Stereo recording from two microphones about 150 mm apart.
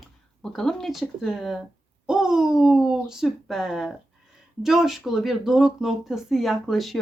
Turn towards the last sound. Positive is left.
turn(degrees=0)  # may be behind; listen again after turning